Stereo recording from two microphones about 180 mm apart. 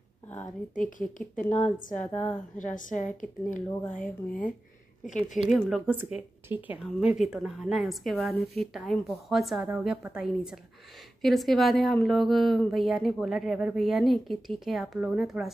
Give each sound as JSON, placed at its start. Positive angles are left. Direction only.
{"t": 0.7, "sound": "a woman's voice", "side_deg": 45}
{"t": 1.4, "sound": "a woman's voice", "side_deg": 10}
{"t": 2.5, "sound": "a woman's voice", "side_deg": 45}
{"t": 5.5, "sound": "speech", "side_deg": 0}